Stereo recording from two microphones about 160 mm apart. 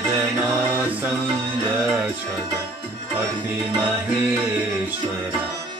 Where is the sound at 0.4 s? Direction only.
10° right (ahead or behind).